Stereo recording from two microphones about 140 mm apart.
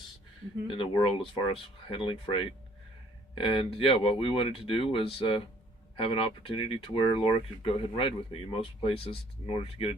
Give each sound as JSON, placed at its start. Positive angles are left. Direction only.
{"t": 0.7, "sound": "speech", "side_deg": 40}